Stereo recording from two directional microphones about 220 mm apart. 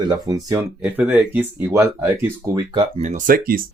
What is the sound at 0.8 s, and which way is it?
Speech, 5° right (ahead or behind).